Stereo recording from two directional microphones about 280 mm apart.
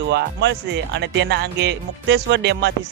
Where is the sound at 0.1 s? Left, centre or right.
Right.